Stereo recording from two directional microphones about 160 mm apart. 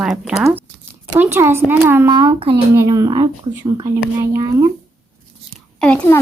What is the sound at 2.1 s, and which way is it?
Speech, 30° right (ahead or behind).